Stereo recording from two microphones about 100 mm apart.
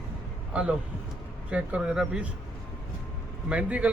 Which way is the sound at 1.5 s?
15° right (ahead or behind).